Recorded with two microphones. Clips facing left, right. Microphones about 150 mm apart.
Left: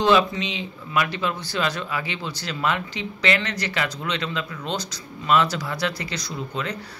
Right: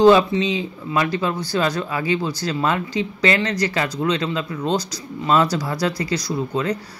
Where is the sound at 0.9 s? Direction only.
35° right (ahead or behind).